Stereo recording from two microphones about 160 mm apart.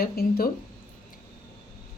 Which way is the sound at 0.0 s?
70° left (ahead or behind).